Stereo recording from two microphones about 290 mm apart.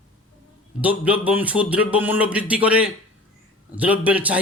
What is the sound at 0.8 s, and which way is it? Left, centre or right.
A man's voice, centre.